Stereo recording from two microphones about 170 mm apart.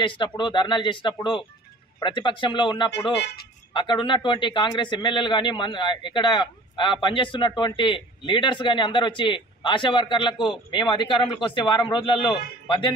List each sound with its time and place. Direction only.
0.0 s a man's voice: 30° left (ahead or behind)